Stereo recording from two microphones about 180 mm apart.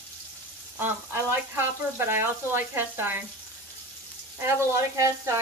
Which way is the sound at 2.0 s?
15° right (ahead or behind).